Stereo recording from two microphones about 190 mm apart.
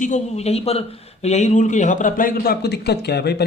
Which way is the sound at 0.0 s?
35° left (ahead or behind).